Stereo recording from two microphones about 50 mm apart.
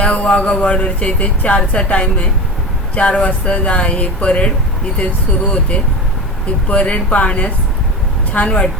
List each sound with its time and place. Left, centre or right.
0.0 s speech: left